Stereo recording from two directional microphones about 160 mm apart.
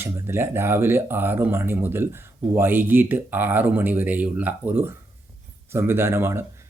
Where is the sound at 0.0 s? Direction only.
15° right (ahead or behind).